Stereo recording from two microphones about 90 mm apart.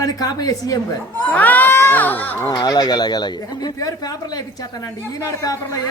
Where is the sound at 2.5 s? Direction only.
50° left (ahead or behind).